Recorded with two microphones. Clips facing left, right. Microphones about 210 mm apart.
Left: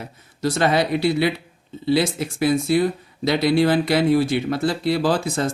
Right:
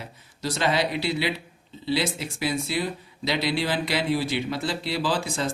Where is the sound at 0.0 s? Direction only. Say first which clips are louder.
Left 8 dB; 50° left (ahead or behind).